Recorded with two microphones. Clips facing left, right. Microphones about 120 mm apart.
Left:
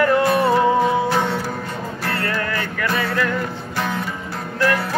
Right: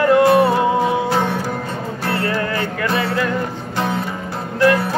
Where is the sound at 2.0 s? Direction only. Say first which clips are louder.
Right 4 dB; 25° right (ahead or behind).